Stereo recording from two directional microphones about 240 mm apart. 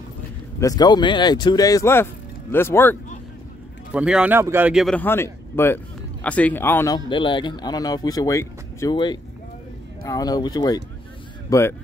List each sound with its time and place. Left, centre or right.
0.6 s speech: centre
3.9 s speech: centre